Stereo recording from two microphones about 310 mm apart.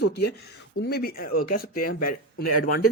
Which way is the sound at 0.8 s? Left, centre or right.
Left.